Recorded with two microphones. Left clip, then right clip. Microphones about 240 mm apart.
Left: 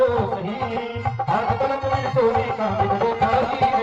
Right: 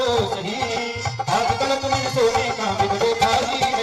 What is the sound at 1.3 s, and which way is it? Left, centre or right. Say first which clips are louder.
Music: right 2 dB; right.